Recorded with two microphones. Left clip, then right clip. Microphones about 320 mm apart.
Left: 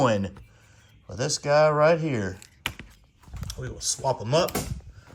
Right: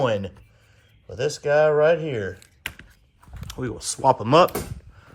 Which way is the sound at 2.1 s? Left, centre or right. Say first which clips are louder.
Right 2 dB; centre.